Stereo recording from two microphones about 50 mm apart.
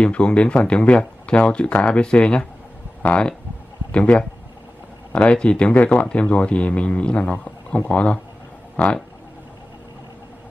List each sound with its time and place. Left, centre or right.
0.0 s speech: left